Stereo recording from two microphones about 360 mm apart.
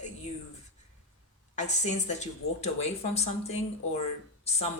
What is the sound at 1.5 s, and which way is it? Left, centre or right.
Speech, centre.